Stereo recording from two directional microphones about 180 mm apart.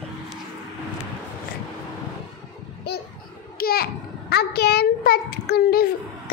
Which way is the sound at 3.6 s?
55° left (ahead or behind).